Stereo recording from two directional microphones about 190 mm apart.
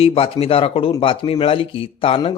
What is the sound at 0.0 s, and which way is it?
Speech, 30° left (ahead or behind).